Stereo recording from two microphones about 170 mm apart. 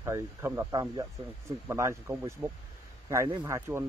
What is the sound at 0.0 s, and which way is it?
Speech, 15° right (ahead or behind).